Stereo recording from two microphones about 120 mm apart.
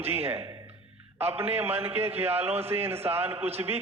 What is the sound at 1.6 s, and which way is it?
A man's voice, 20° right (ahead or behind).